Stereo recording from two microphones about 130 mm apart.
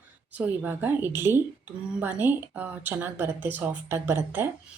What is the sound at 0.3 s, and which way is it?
A woman's voice, 15° right (ahead or behind).